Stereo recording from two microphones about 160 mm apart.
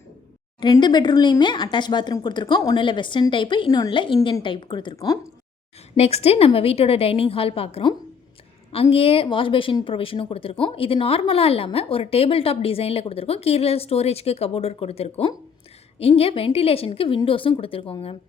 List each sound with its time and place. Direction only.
0.6 s speech: 25° left (ahead or behind)
6.0 s speech: 40° left (ahead or behind)